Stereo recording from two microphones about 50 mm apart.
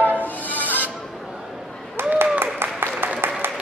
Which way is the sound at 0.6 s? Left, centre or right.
Right.